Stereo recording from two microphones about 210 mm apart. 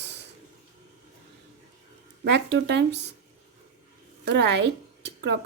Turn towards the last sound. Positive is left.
turn(degrees=-55)  # may be behind; listen again after turning